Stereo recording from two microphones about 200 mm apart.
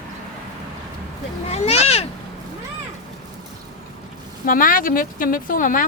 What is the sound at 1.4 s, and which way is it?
Speech, 30° left (ahead or behind).